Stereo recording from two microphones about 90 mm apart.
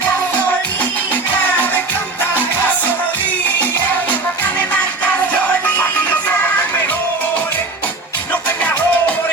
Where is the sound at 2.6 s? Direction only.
20° left (ahead or behind).